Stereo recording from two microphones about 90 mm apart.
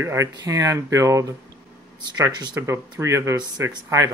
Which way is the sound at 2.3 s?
50° right (ahead or behind).